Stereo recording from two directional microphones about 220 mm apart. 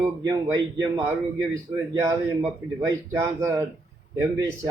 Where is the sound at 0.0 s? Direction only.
10° right (ahead or behind).